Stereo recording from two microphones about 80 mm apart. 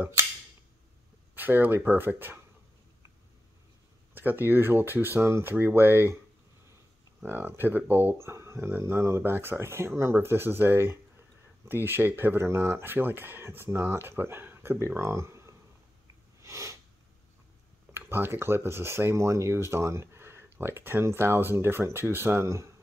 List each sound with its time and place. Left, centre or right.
1.3 s speech: right
4.1 s speech: right
7.2 s speech: right
16.3 s a sound: right
17.9 s speech: right